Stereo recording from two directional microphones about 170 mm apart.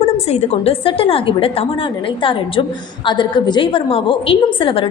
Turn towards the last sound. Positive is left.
turn(degrees=30)  # may be behind; listen again after turning